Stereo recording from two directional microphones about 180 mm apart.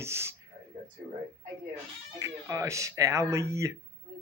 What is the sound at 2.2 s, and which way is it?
Speech, 15° right (ahead or behind).